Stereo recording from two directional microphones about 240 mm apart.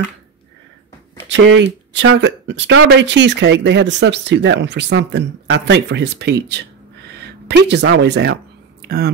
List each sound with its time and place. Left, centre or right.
1.3 s speech: right